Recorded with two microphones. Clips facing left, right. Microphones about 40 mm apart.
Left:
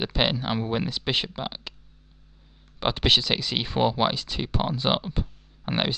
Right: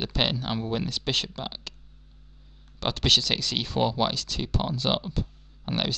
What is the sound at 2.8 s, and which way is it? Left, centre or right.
Speech, centre.